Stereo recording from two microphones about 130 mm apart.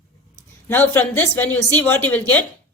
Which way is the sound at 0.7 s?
15° left (ahead or behind).